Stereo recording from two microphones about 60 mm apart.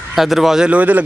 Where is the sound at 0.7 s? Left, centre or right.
Right.